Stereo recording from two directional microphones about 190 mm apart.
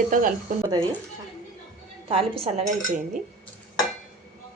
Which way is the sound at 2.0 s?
30° right (ahead or behind).